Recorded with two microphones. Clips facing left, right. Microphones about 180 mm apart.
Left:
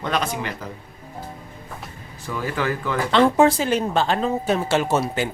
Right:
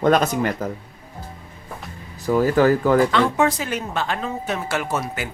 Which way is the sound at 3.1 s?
30° left (ahead or behind).